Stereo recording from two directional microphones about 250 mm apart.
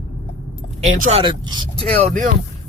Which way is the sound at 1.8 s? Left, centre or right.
Right.